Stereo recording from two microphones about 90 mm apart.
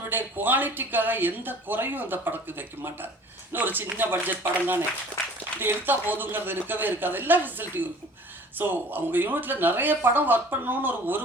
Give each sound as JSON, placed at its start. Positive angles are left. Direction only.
{"t": 0.0, "sound": "speech", "side_deg": -20}